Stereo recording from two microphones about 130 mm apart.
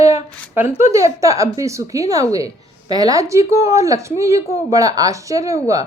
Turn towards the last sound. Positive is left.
turn(degrees=-25)  # may be behind; listen again after turning